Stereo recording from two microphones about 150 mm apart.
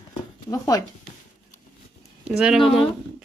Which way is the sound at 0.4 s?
25° left (ahead or behind).